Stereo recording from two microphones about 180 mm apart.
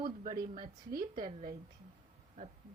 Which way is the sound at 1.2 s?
30° right (ahead or behind).